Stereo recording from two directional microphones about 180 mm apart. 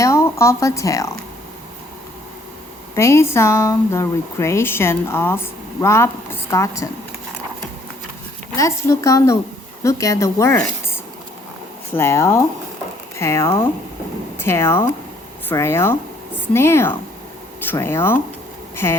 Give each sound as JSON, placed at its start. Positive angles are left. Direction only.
{"t": 0.0, "sound": "speech", "side_deg": 15}
{"t": 2.9, "sound": "speech", "side_deg": 15}
{"t": 8.5, "sound": "speech", "side_deg": 15}
{"t": 11.9, "sound": "speech", "side_deg": 15}